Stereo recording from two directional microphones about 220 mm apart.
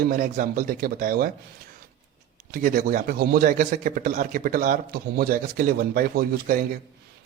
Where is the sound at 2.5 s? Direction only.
40° right (ahead or behind).